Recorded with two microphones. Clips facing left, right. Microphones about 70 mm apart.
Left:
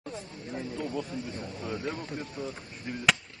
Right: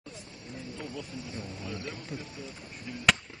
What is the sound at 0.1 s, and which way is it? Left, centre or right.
Speech, left.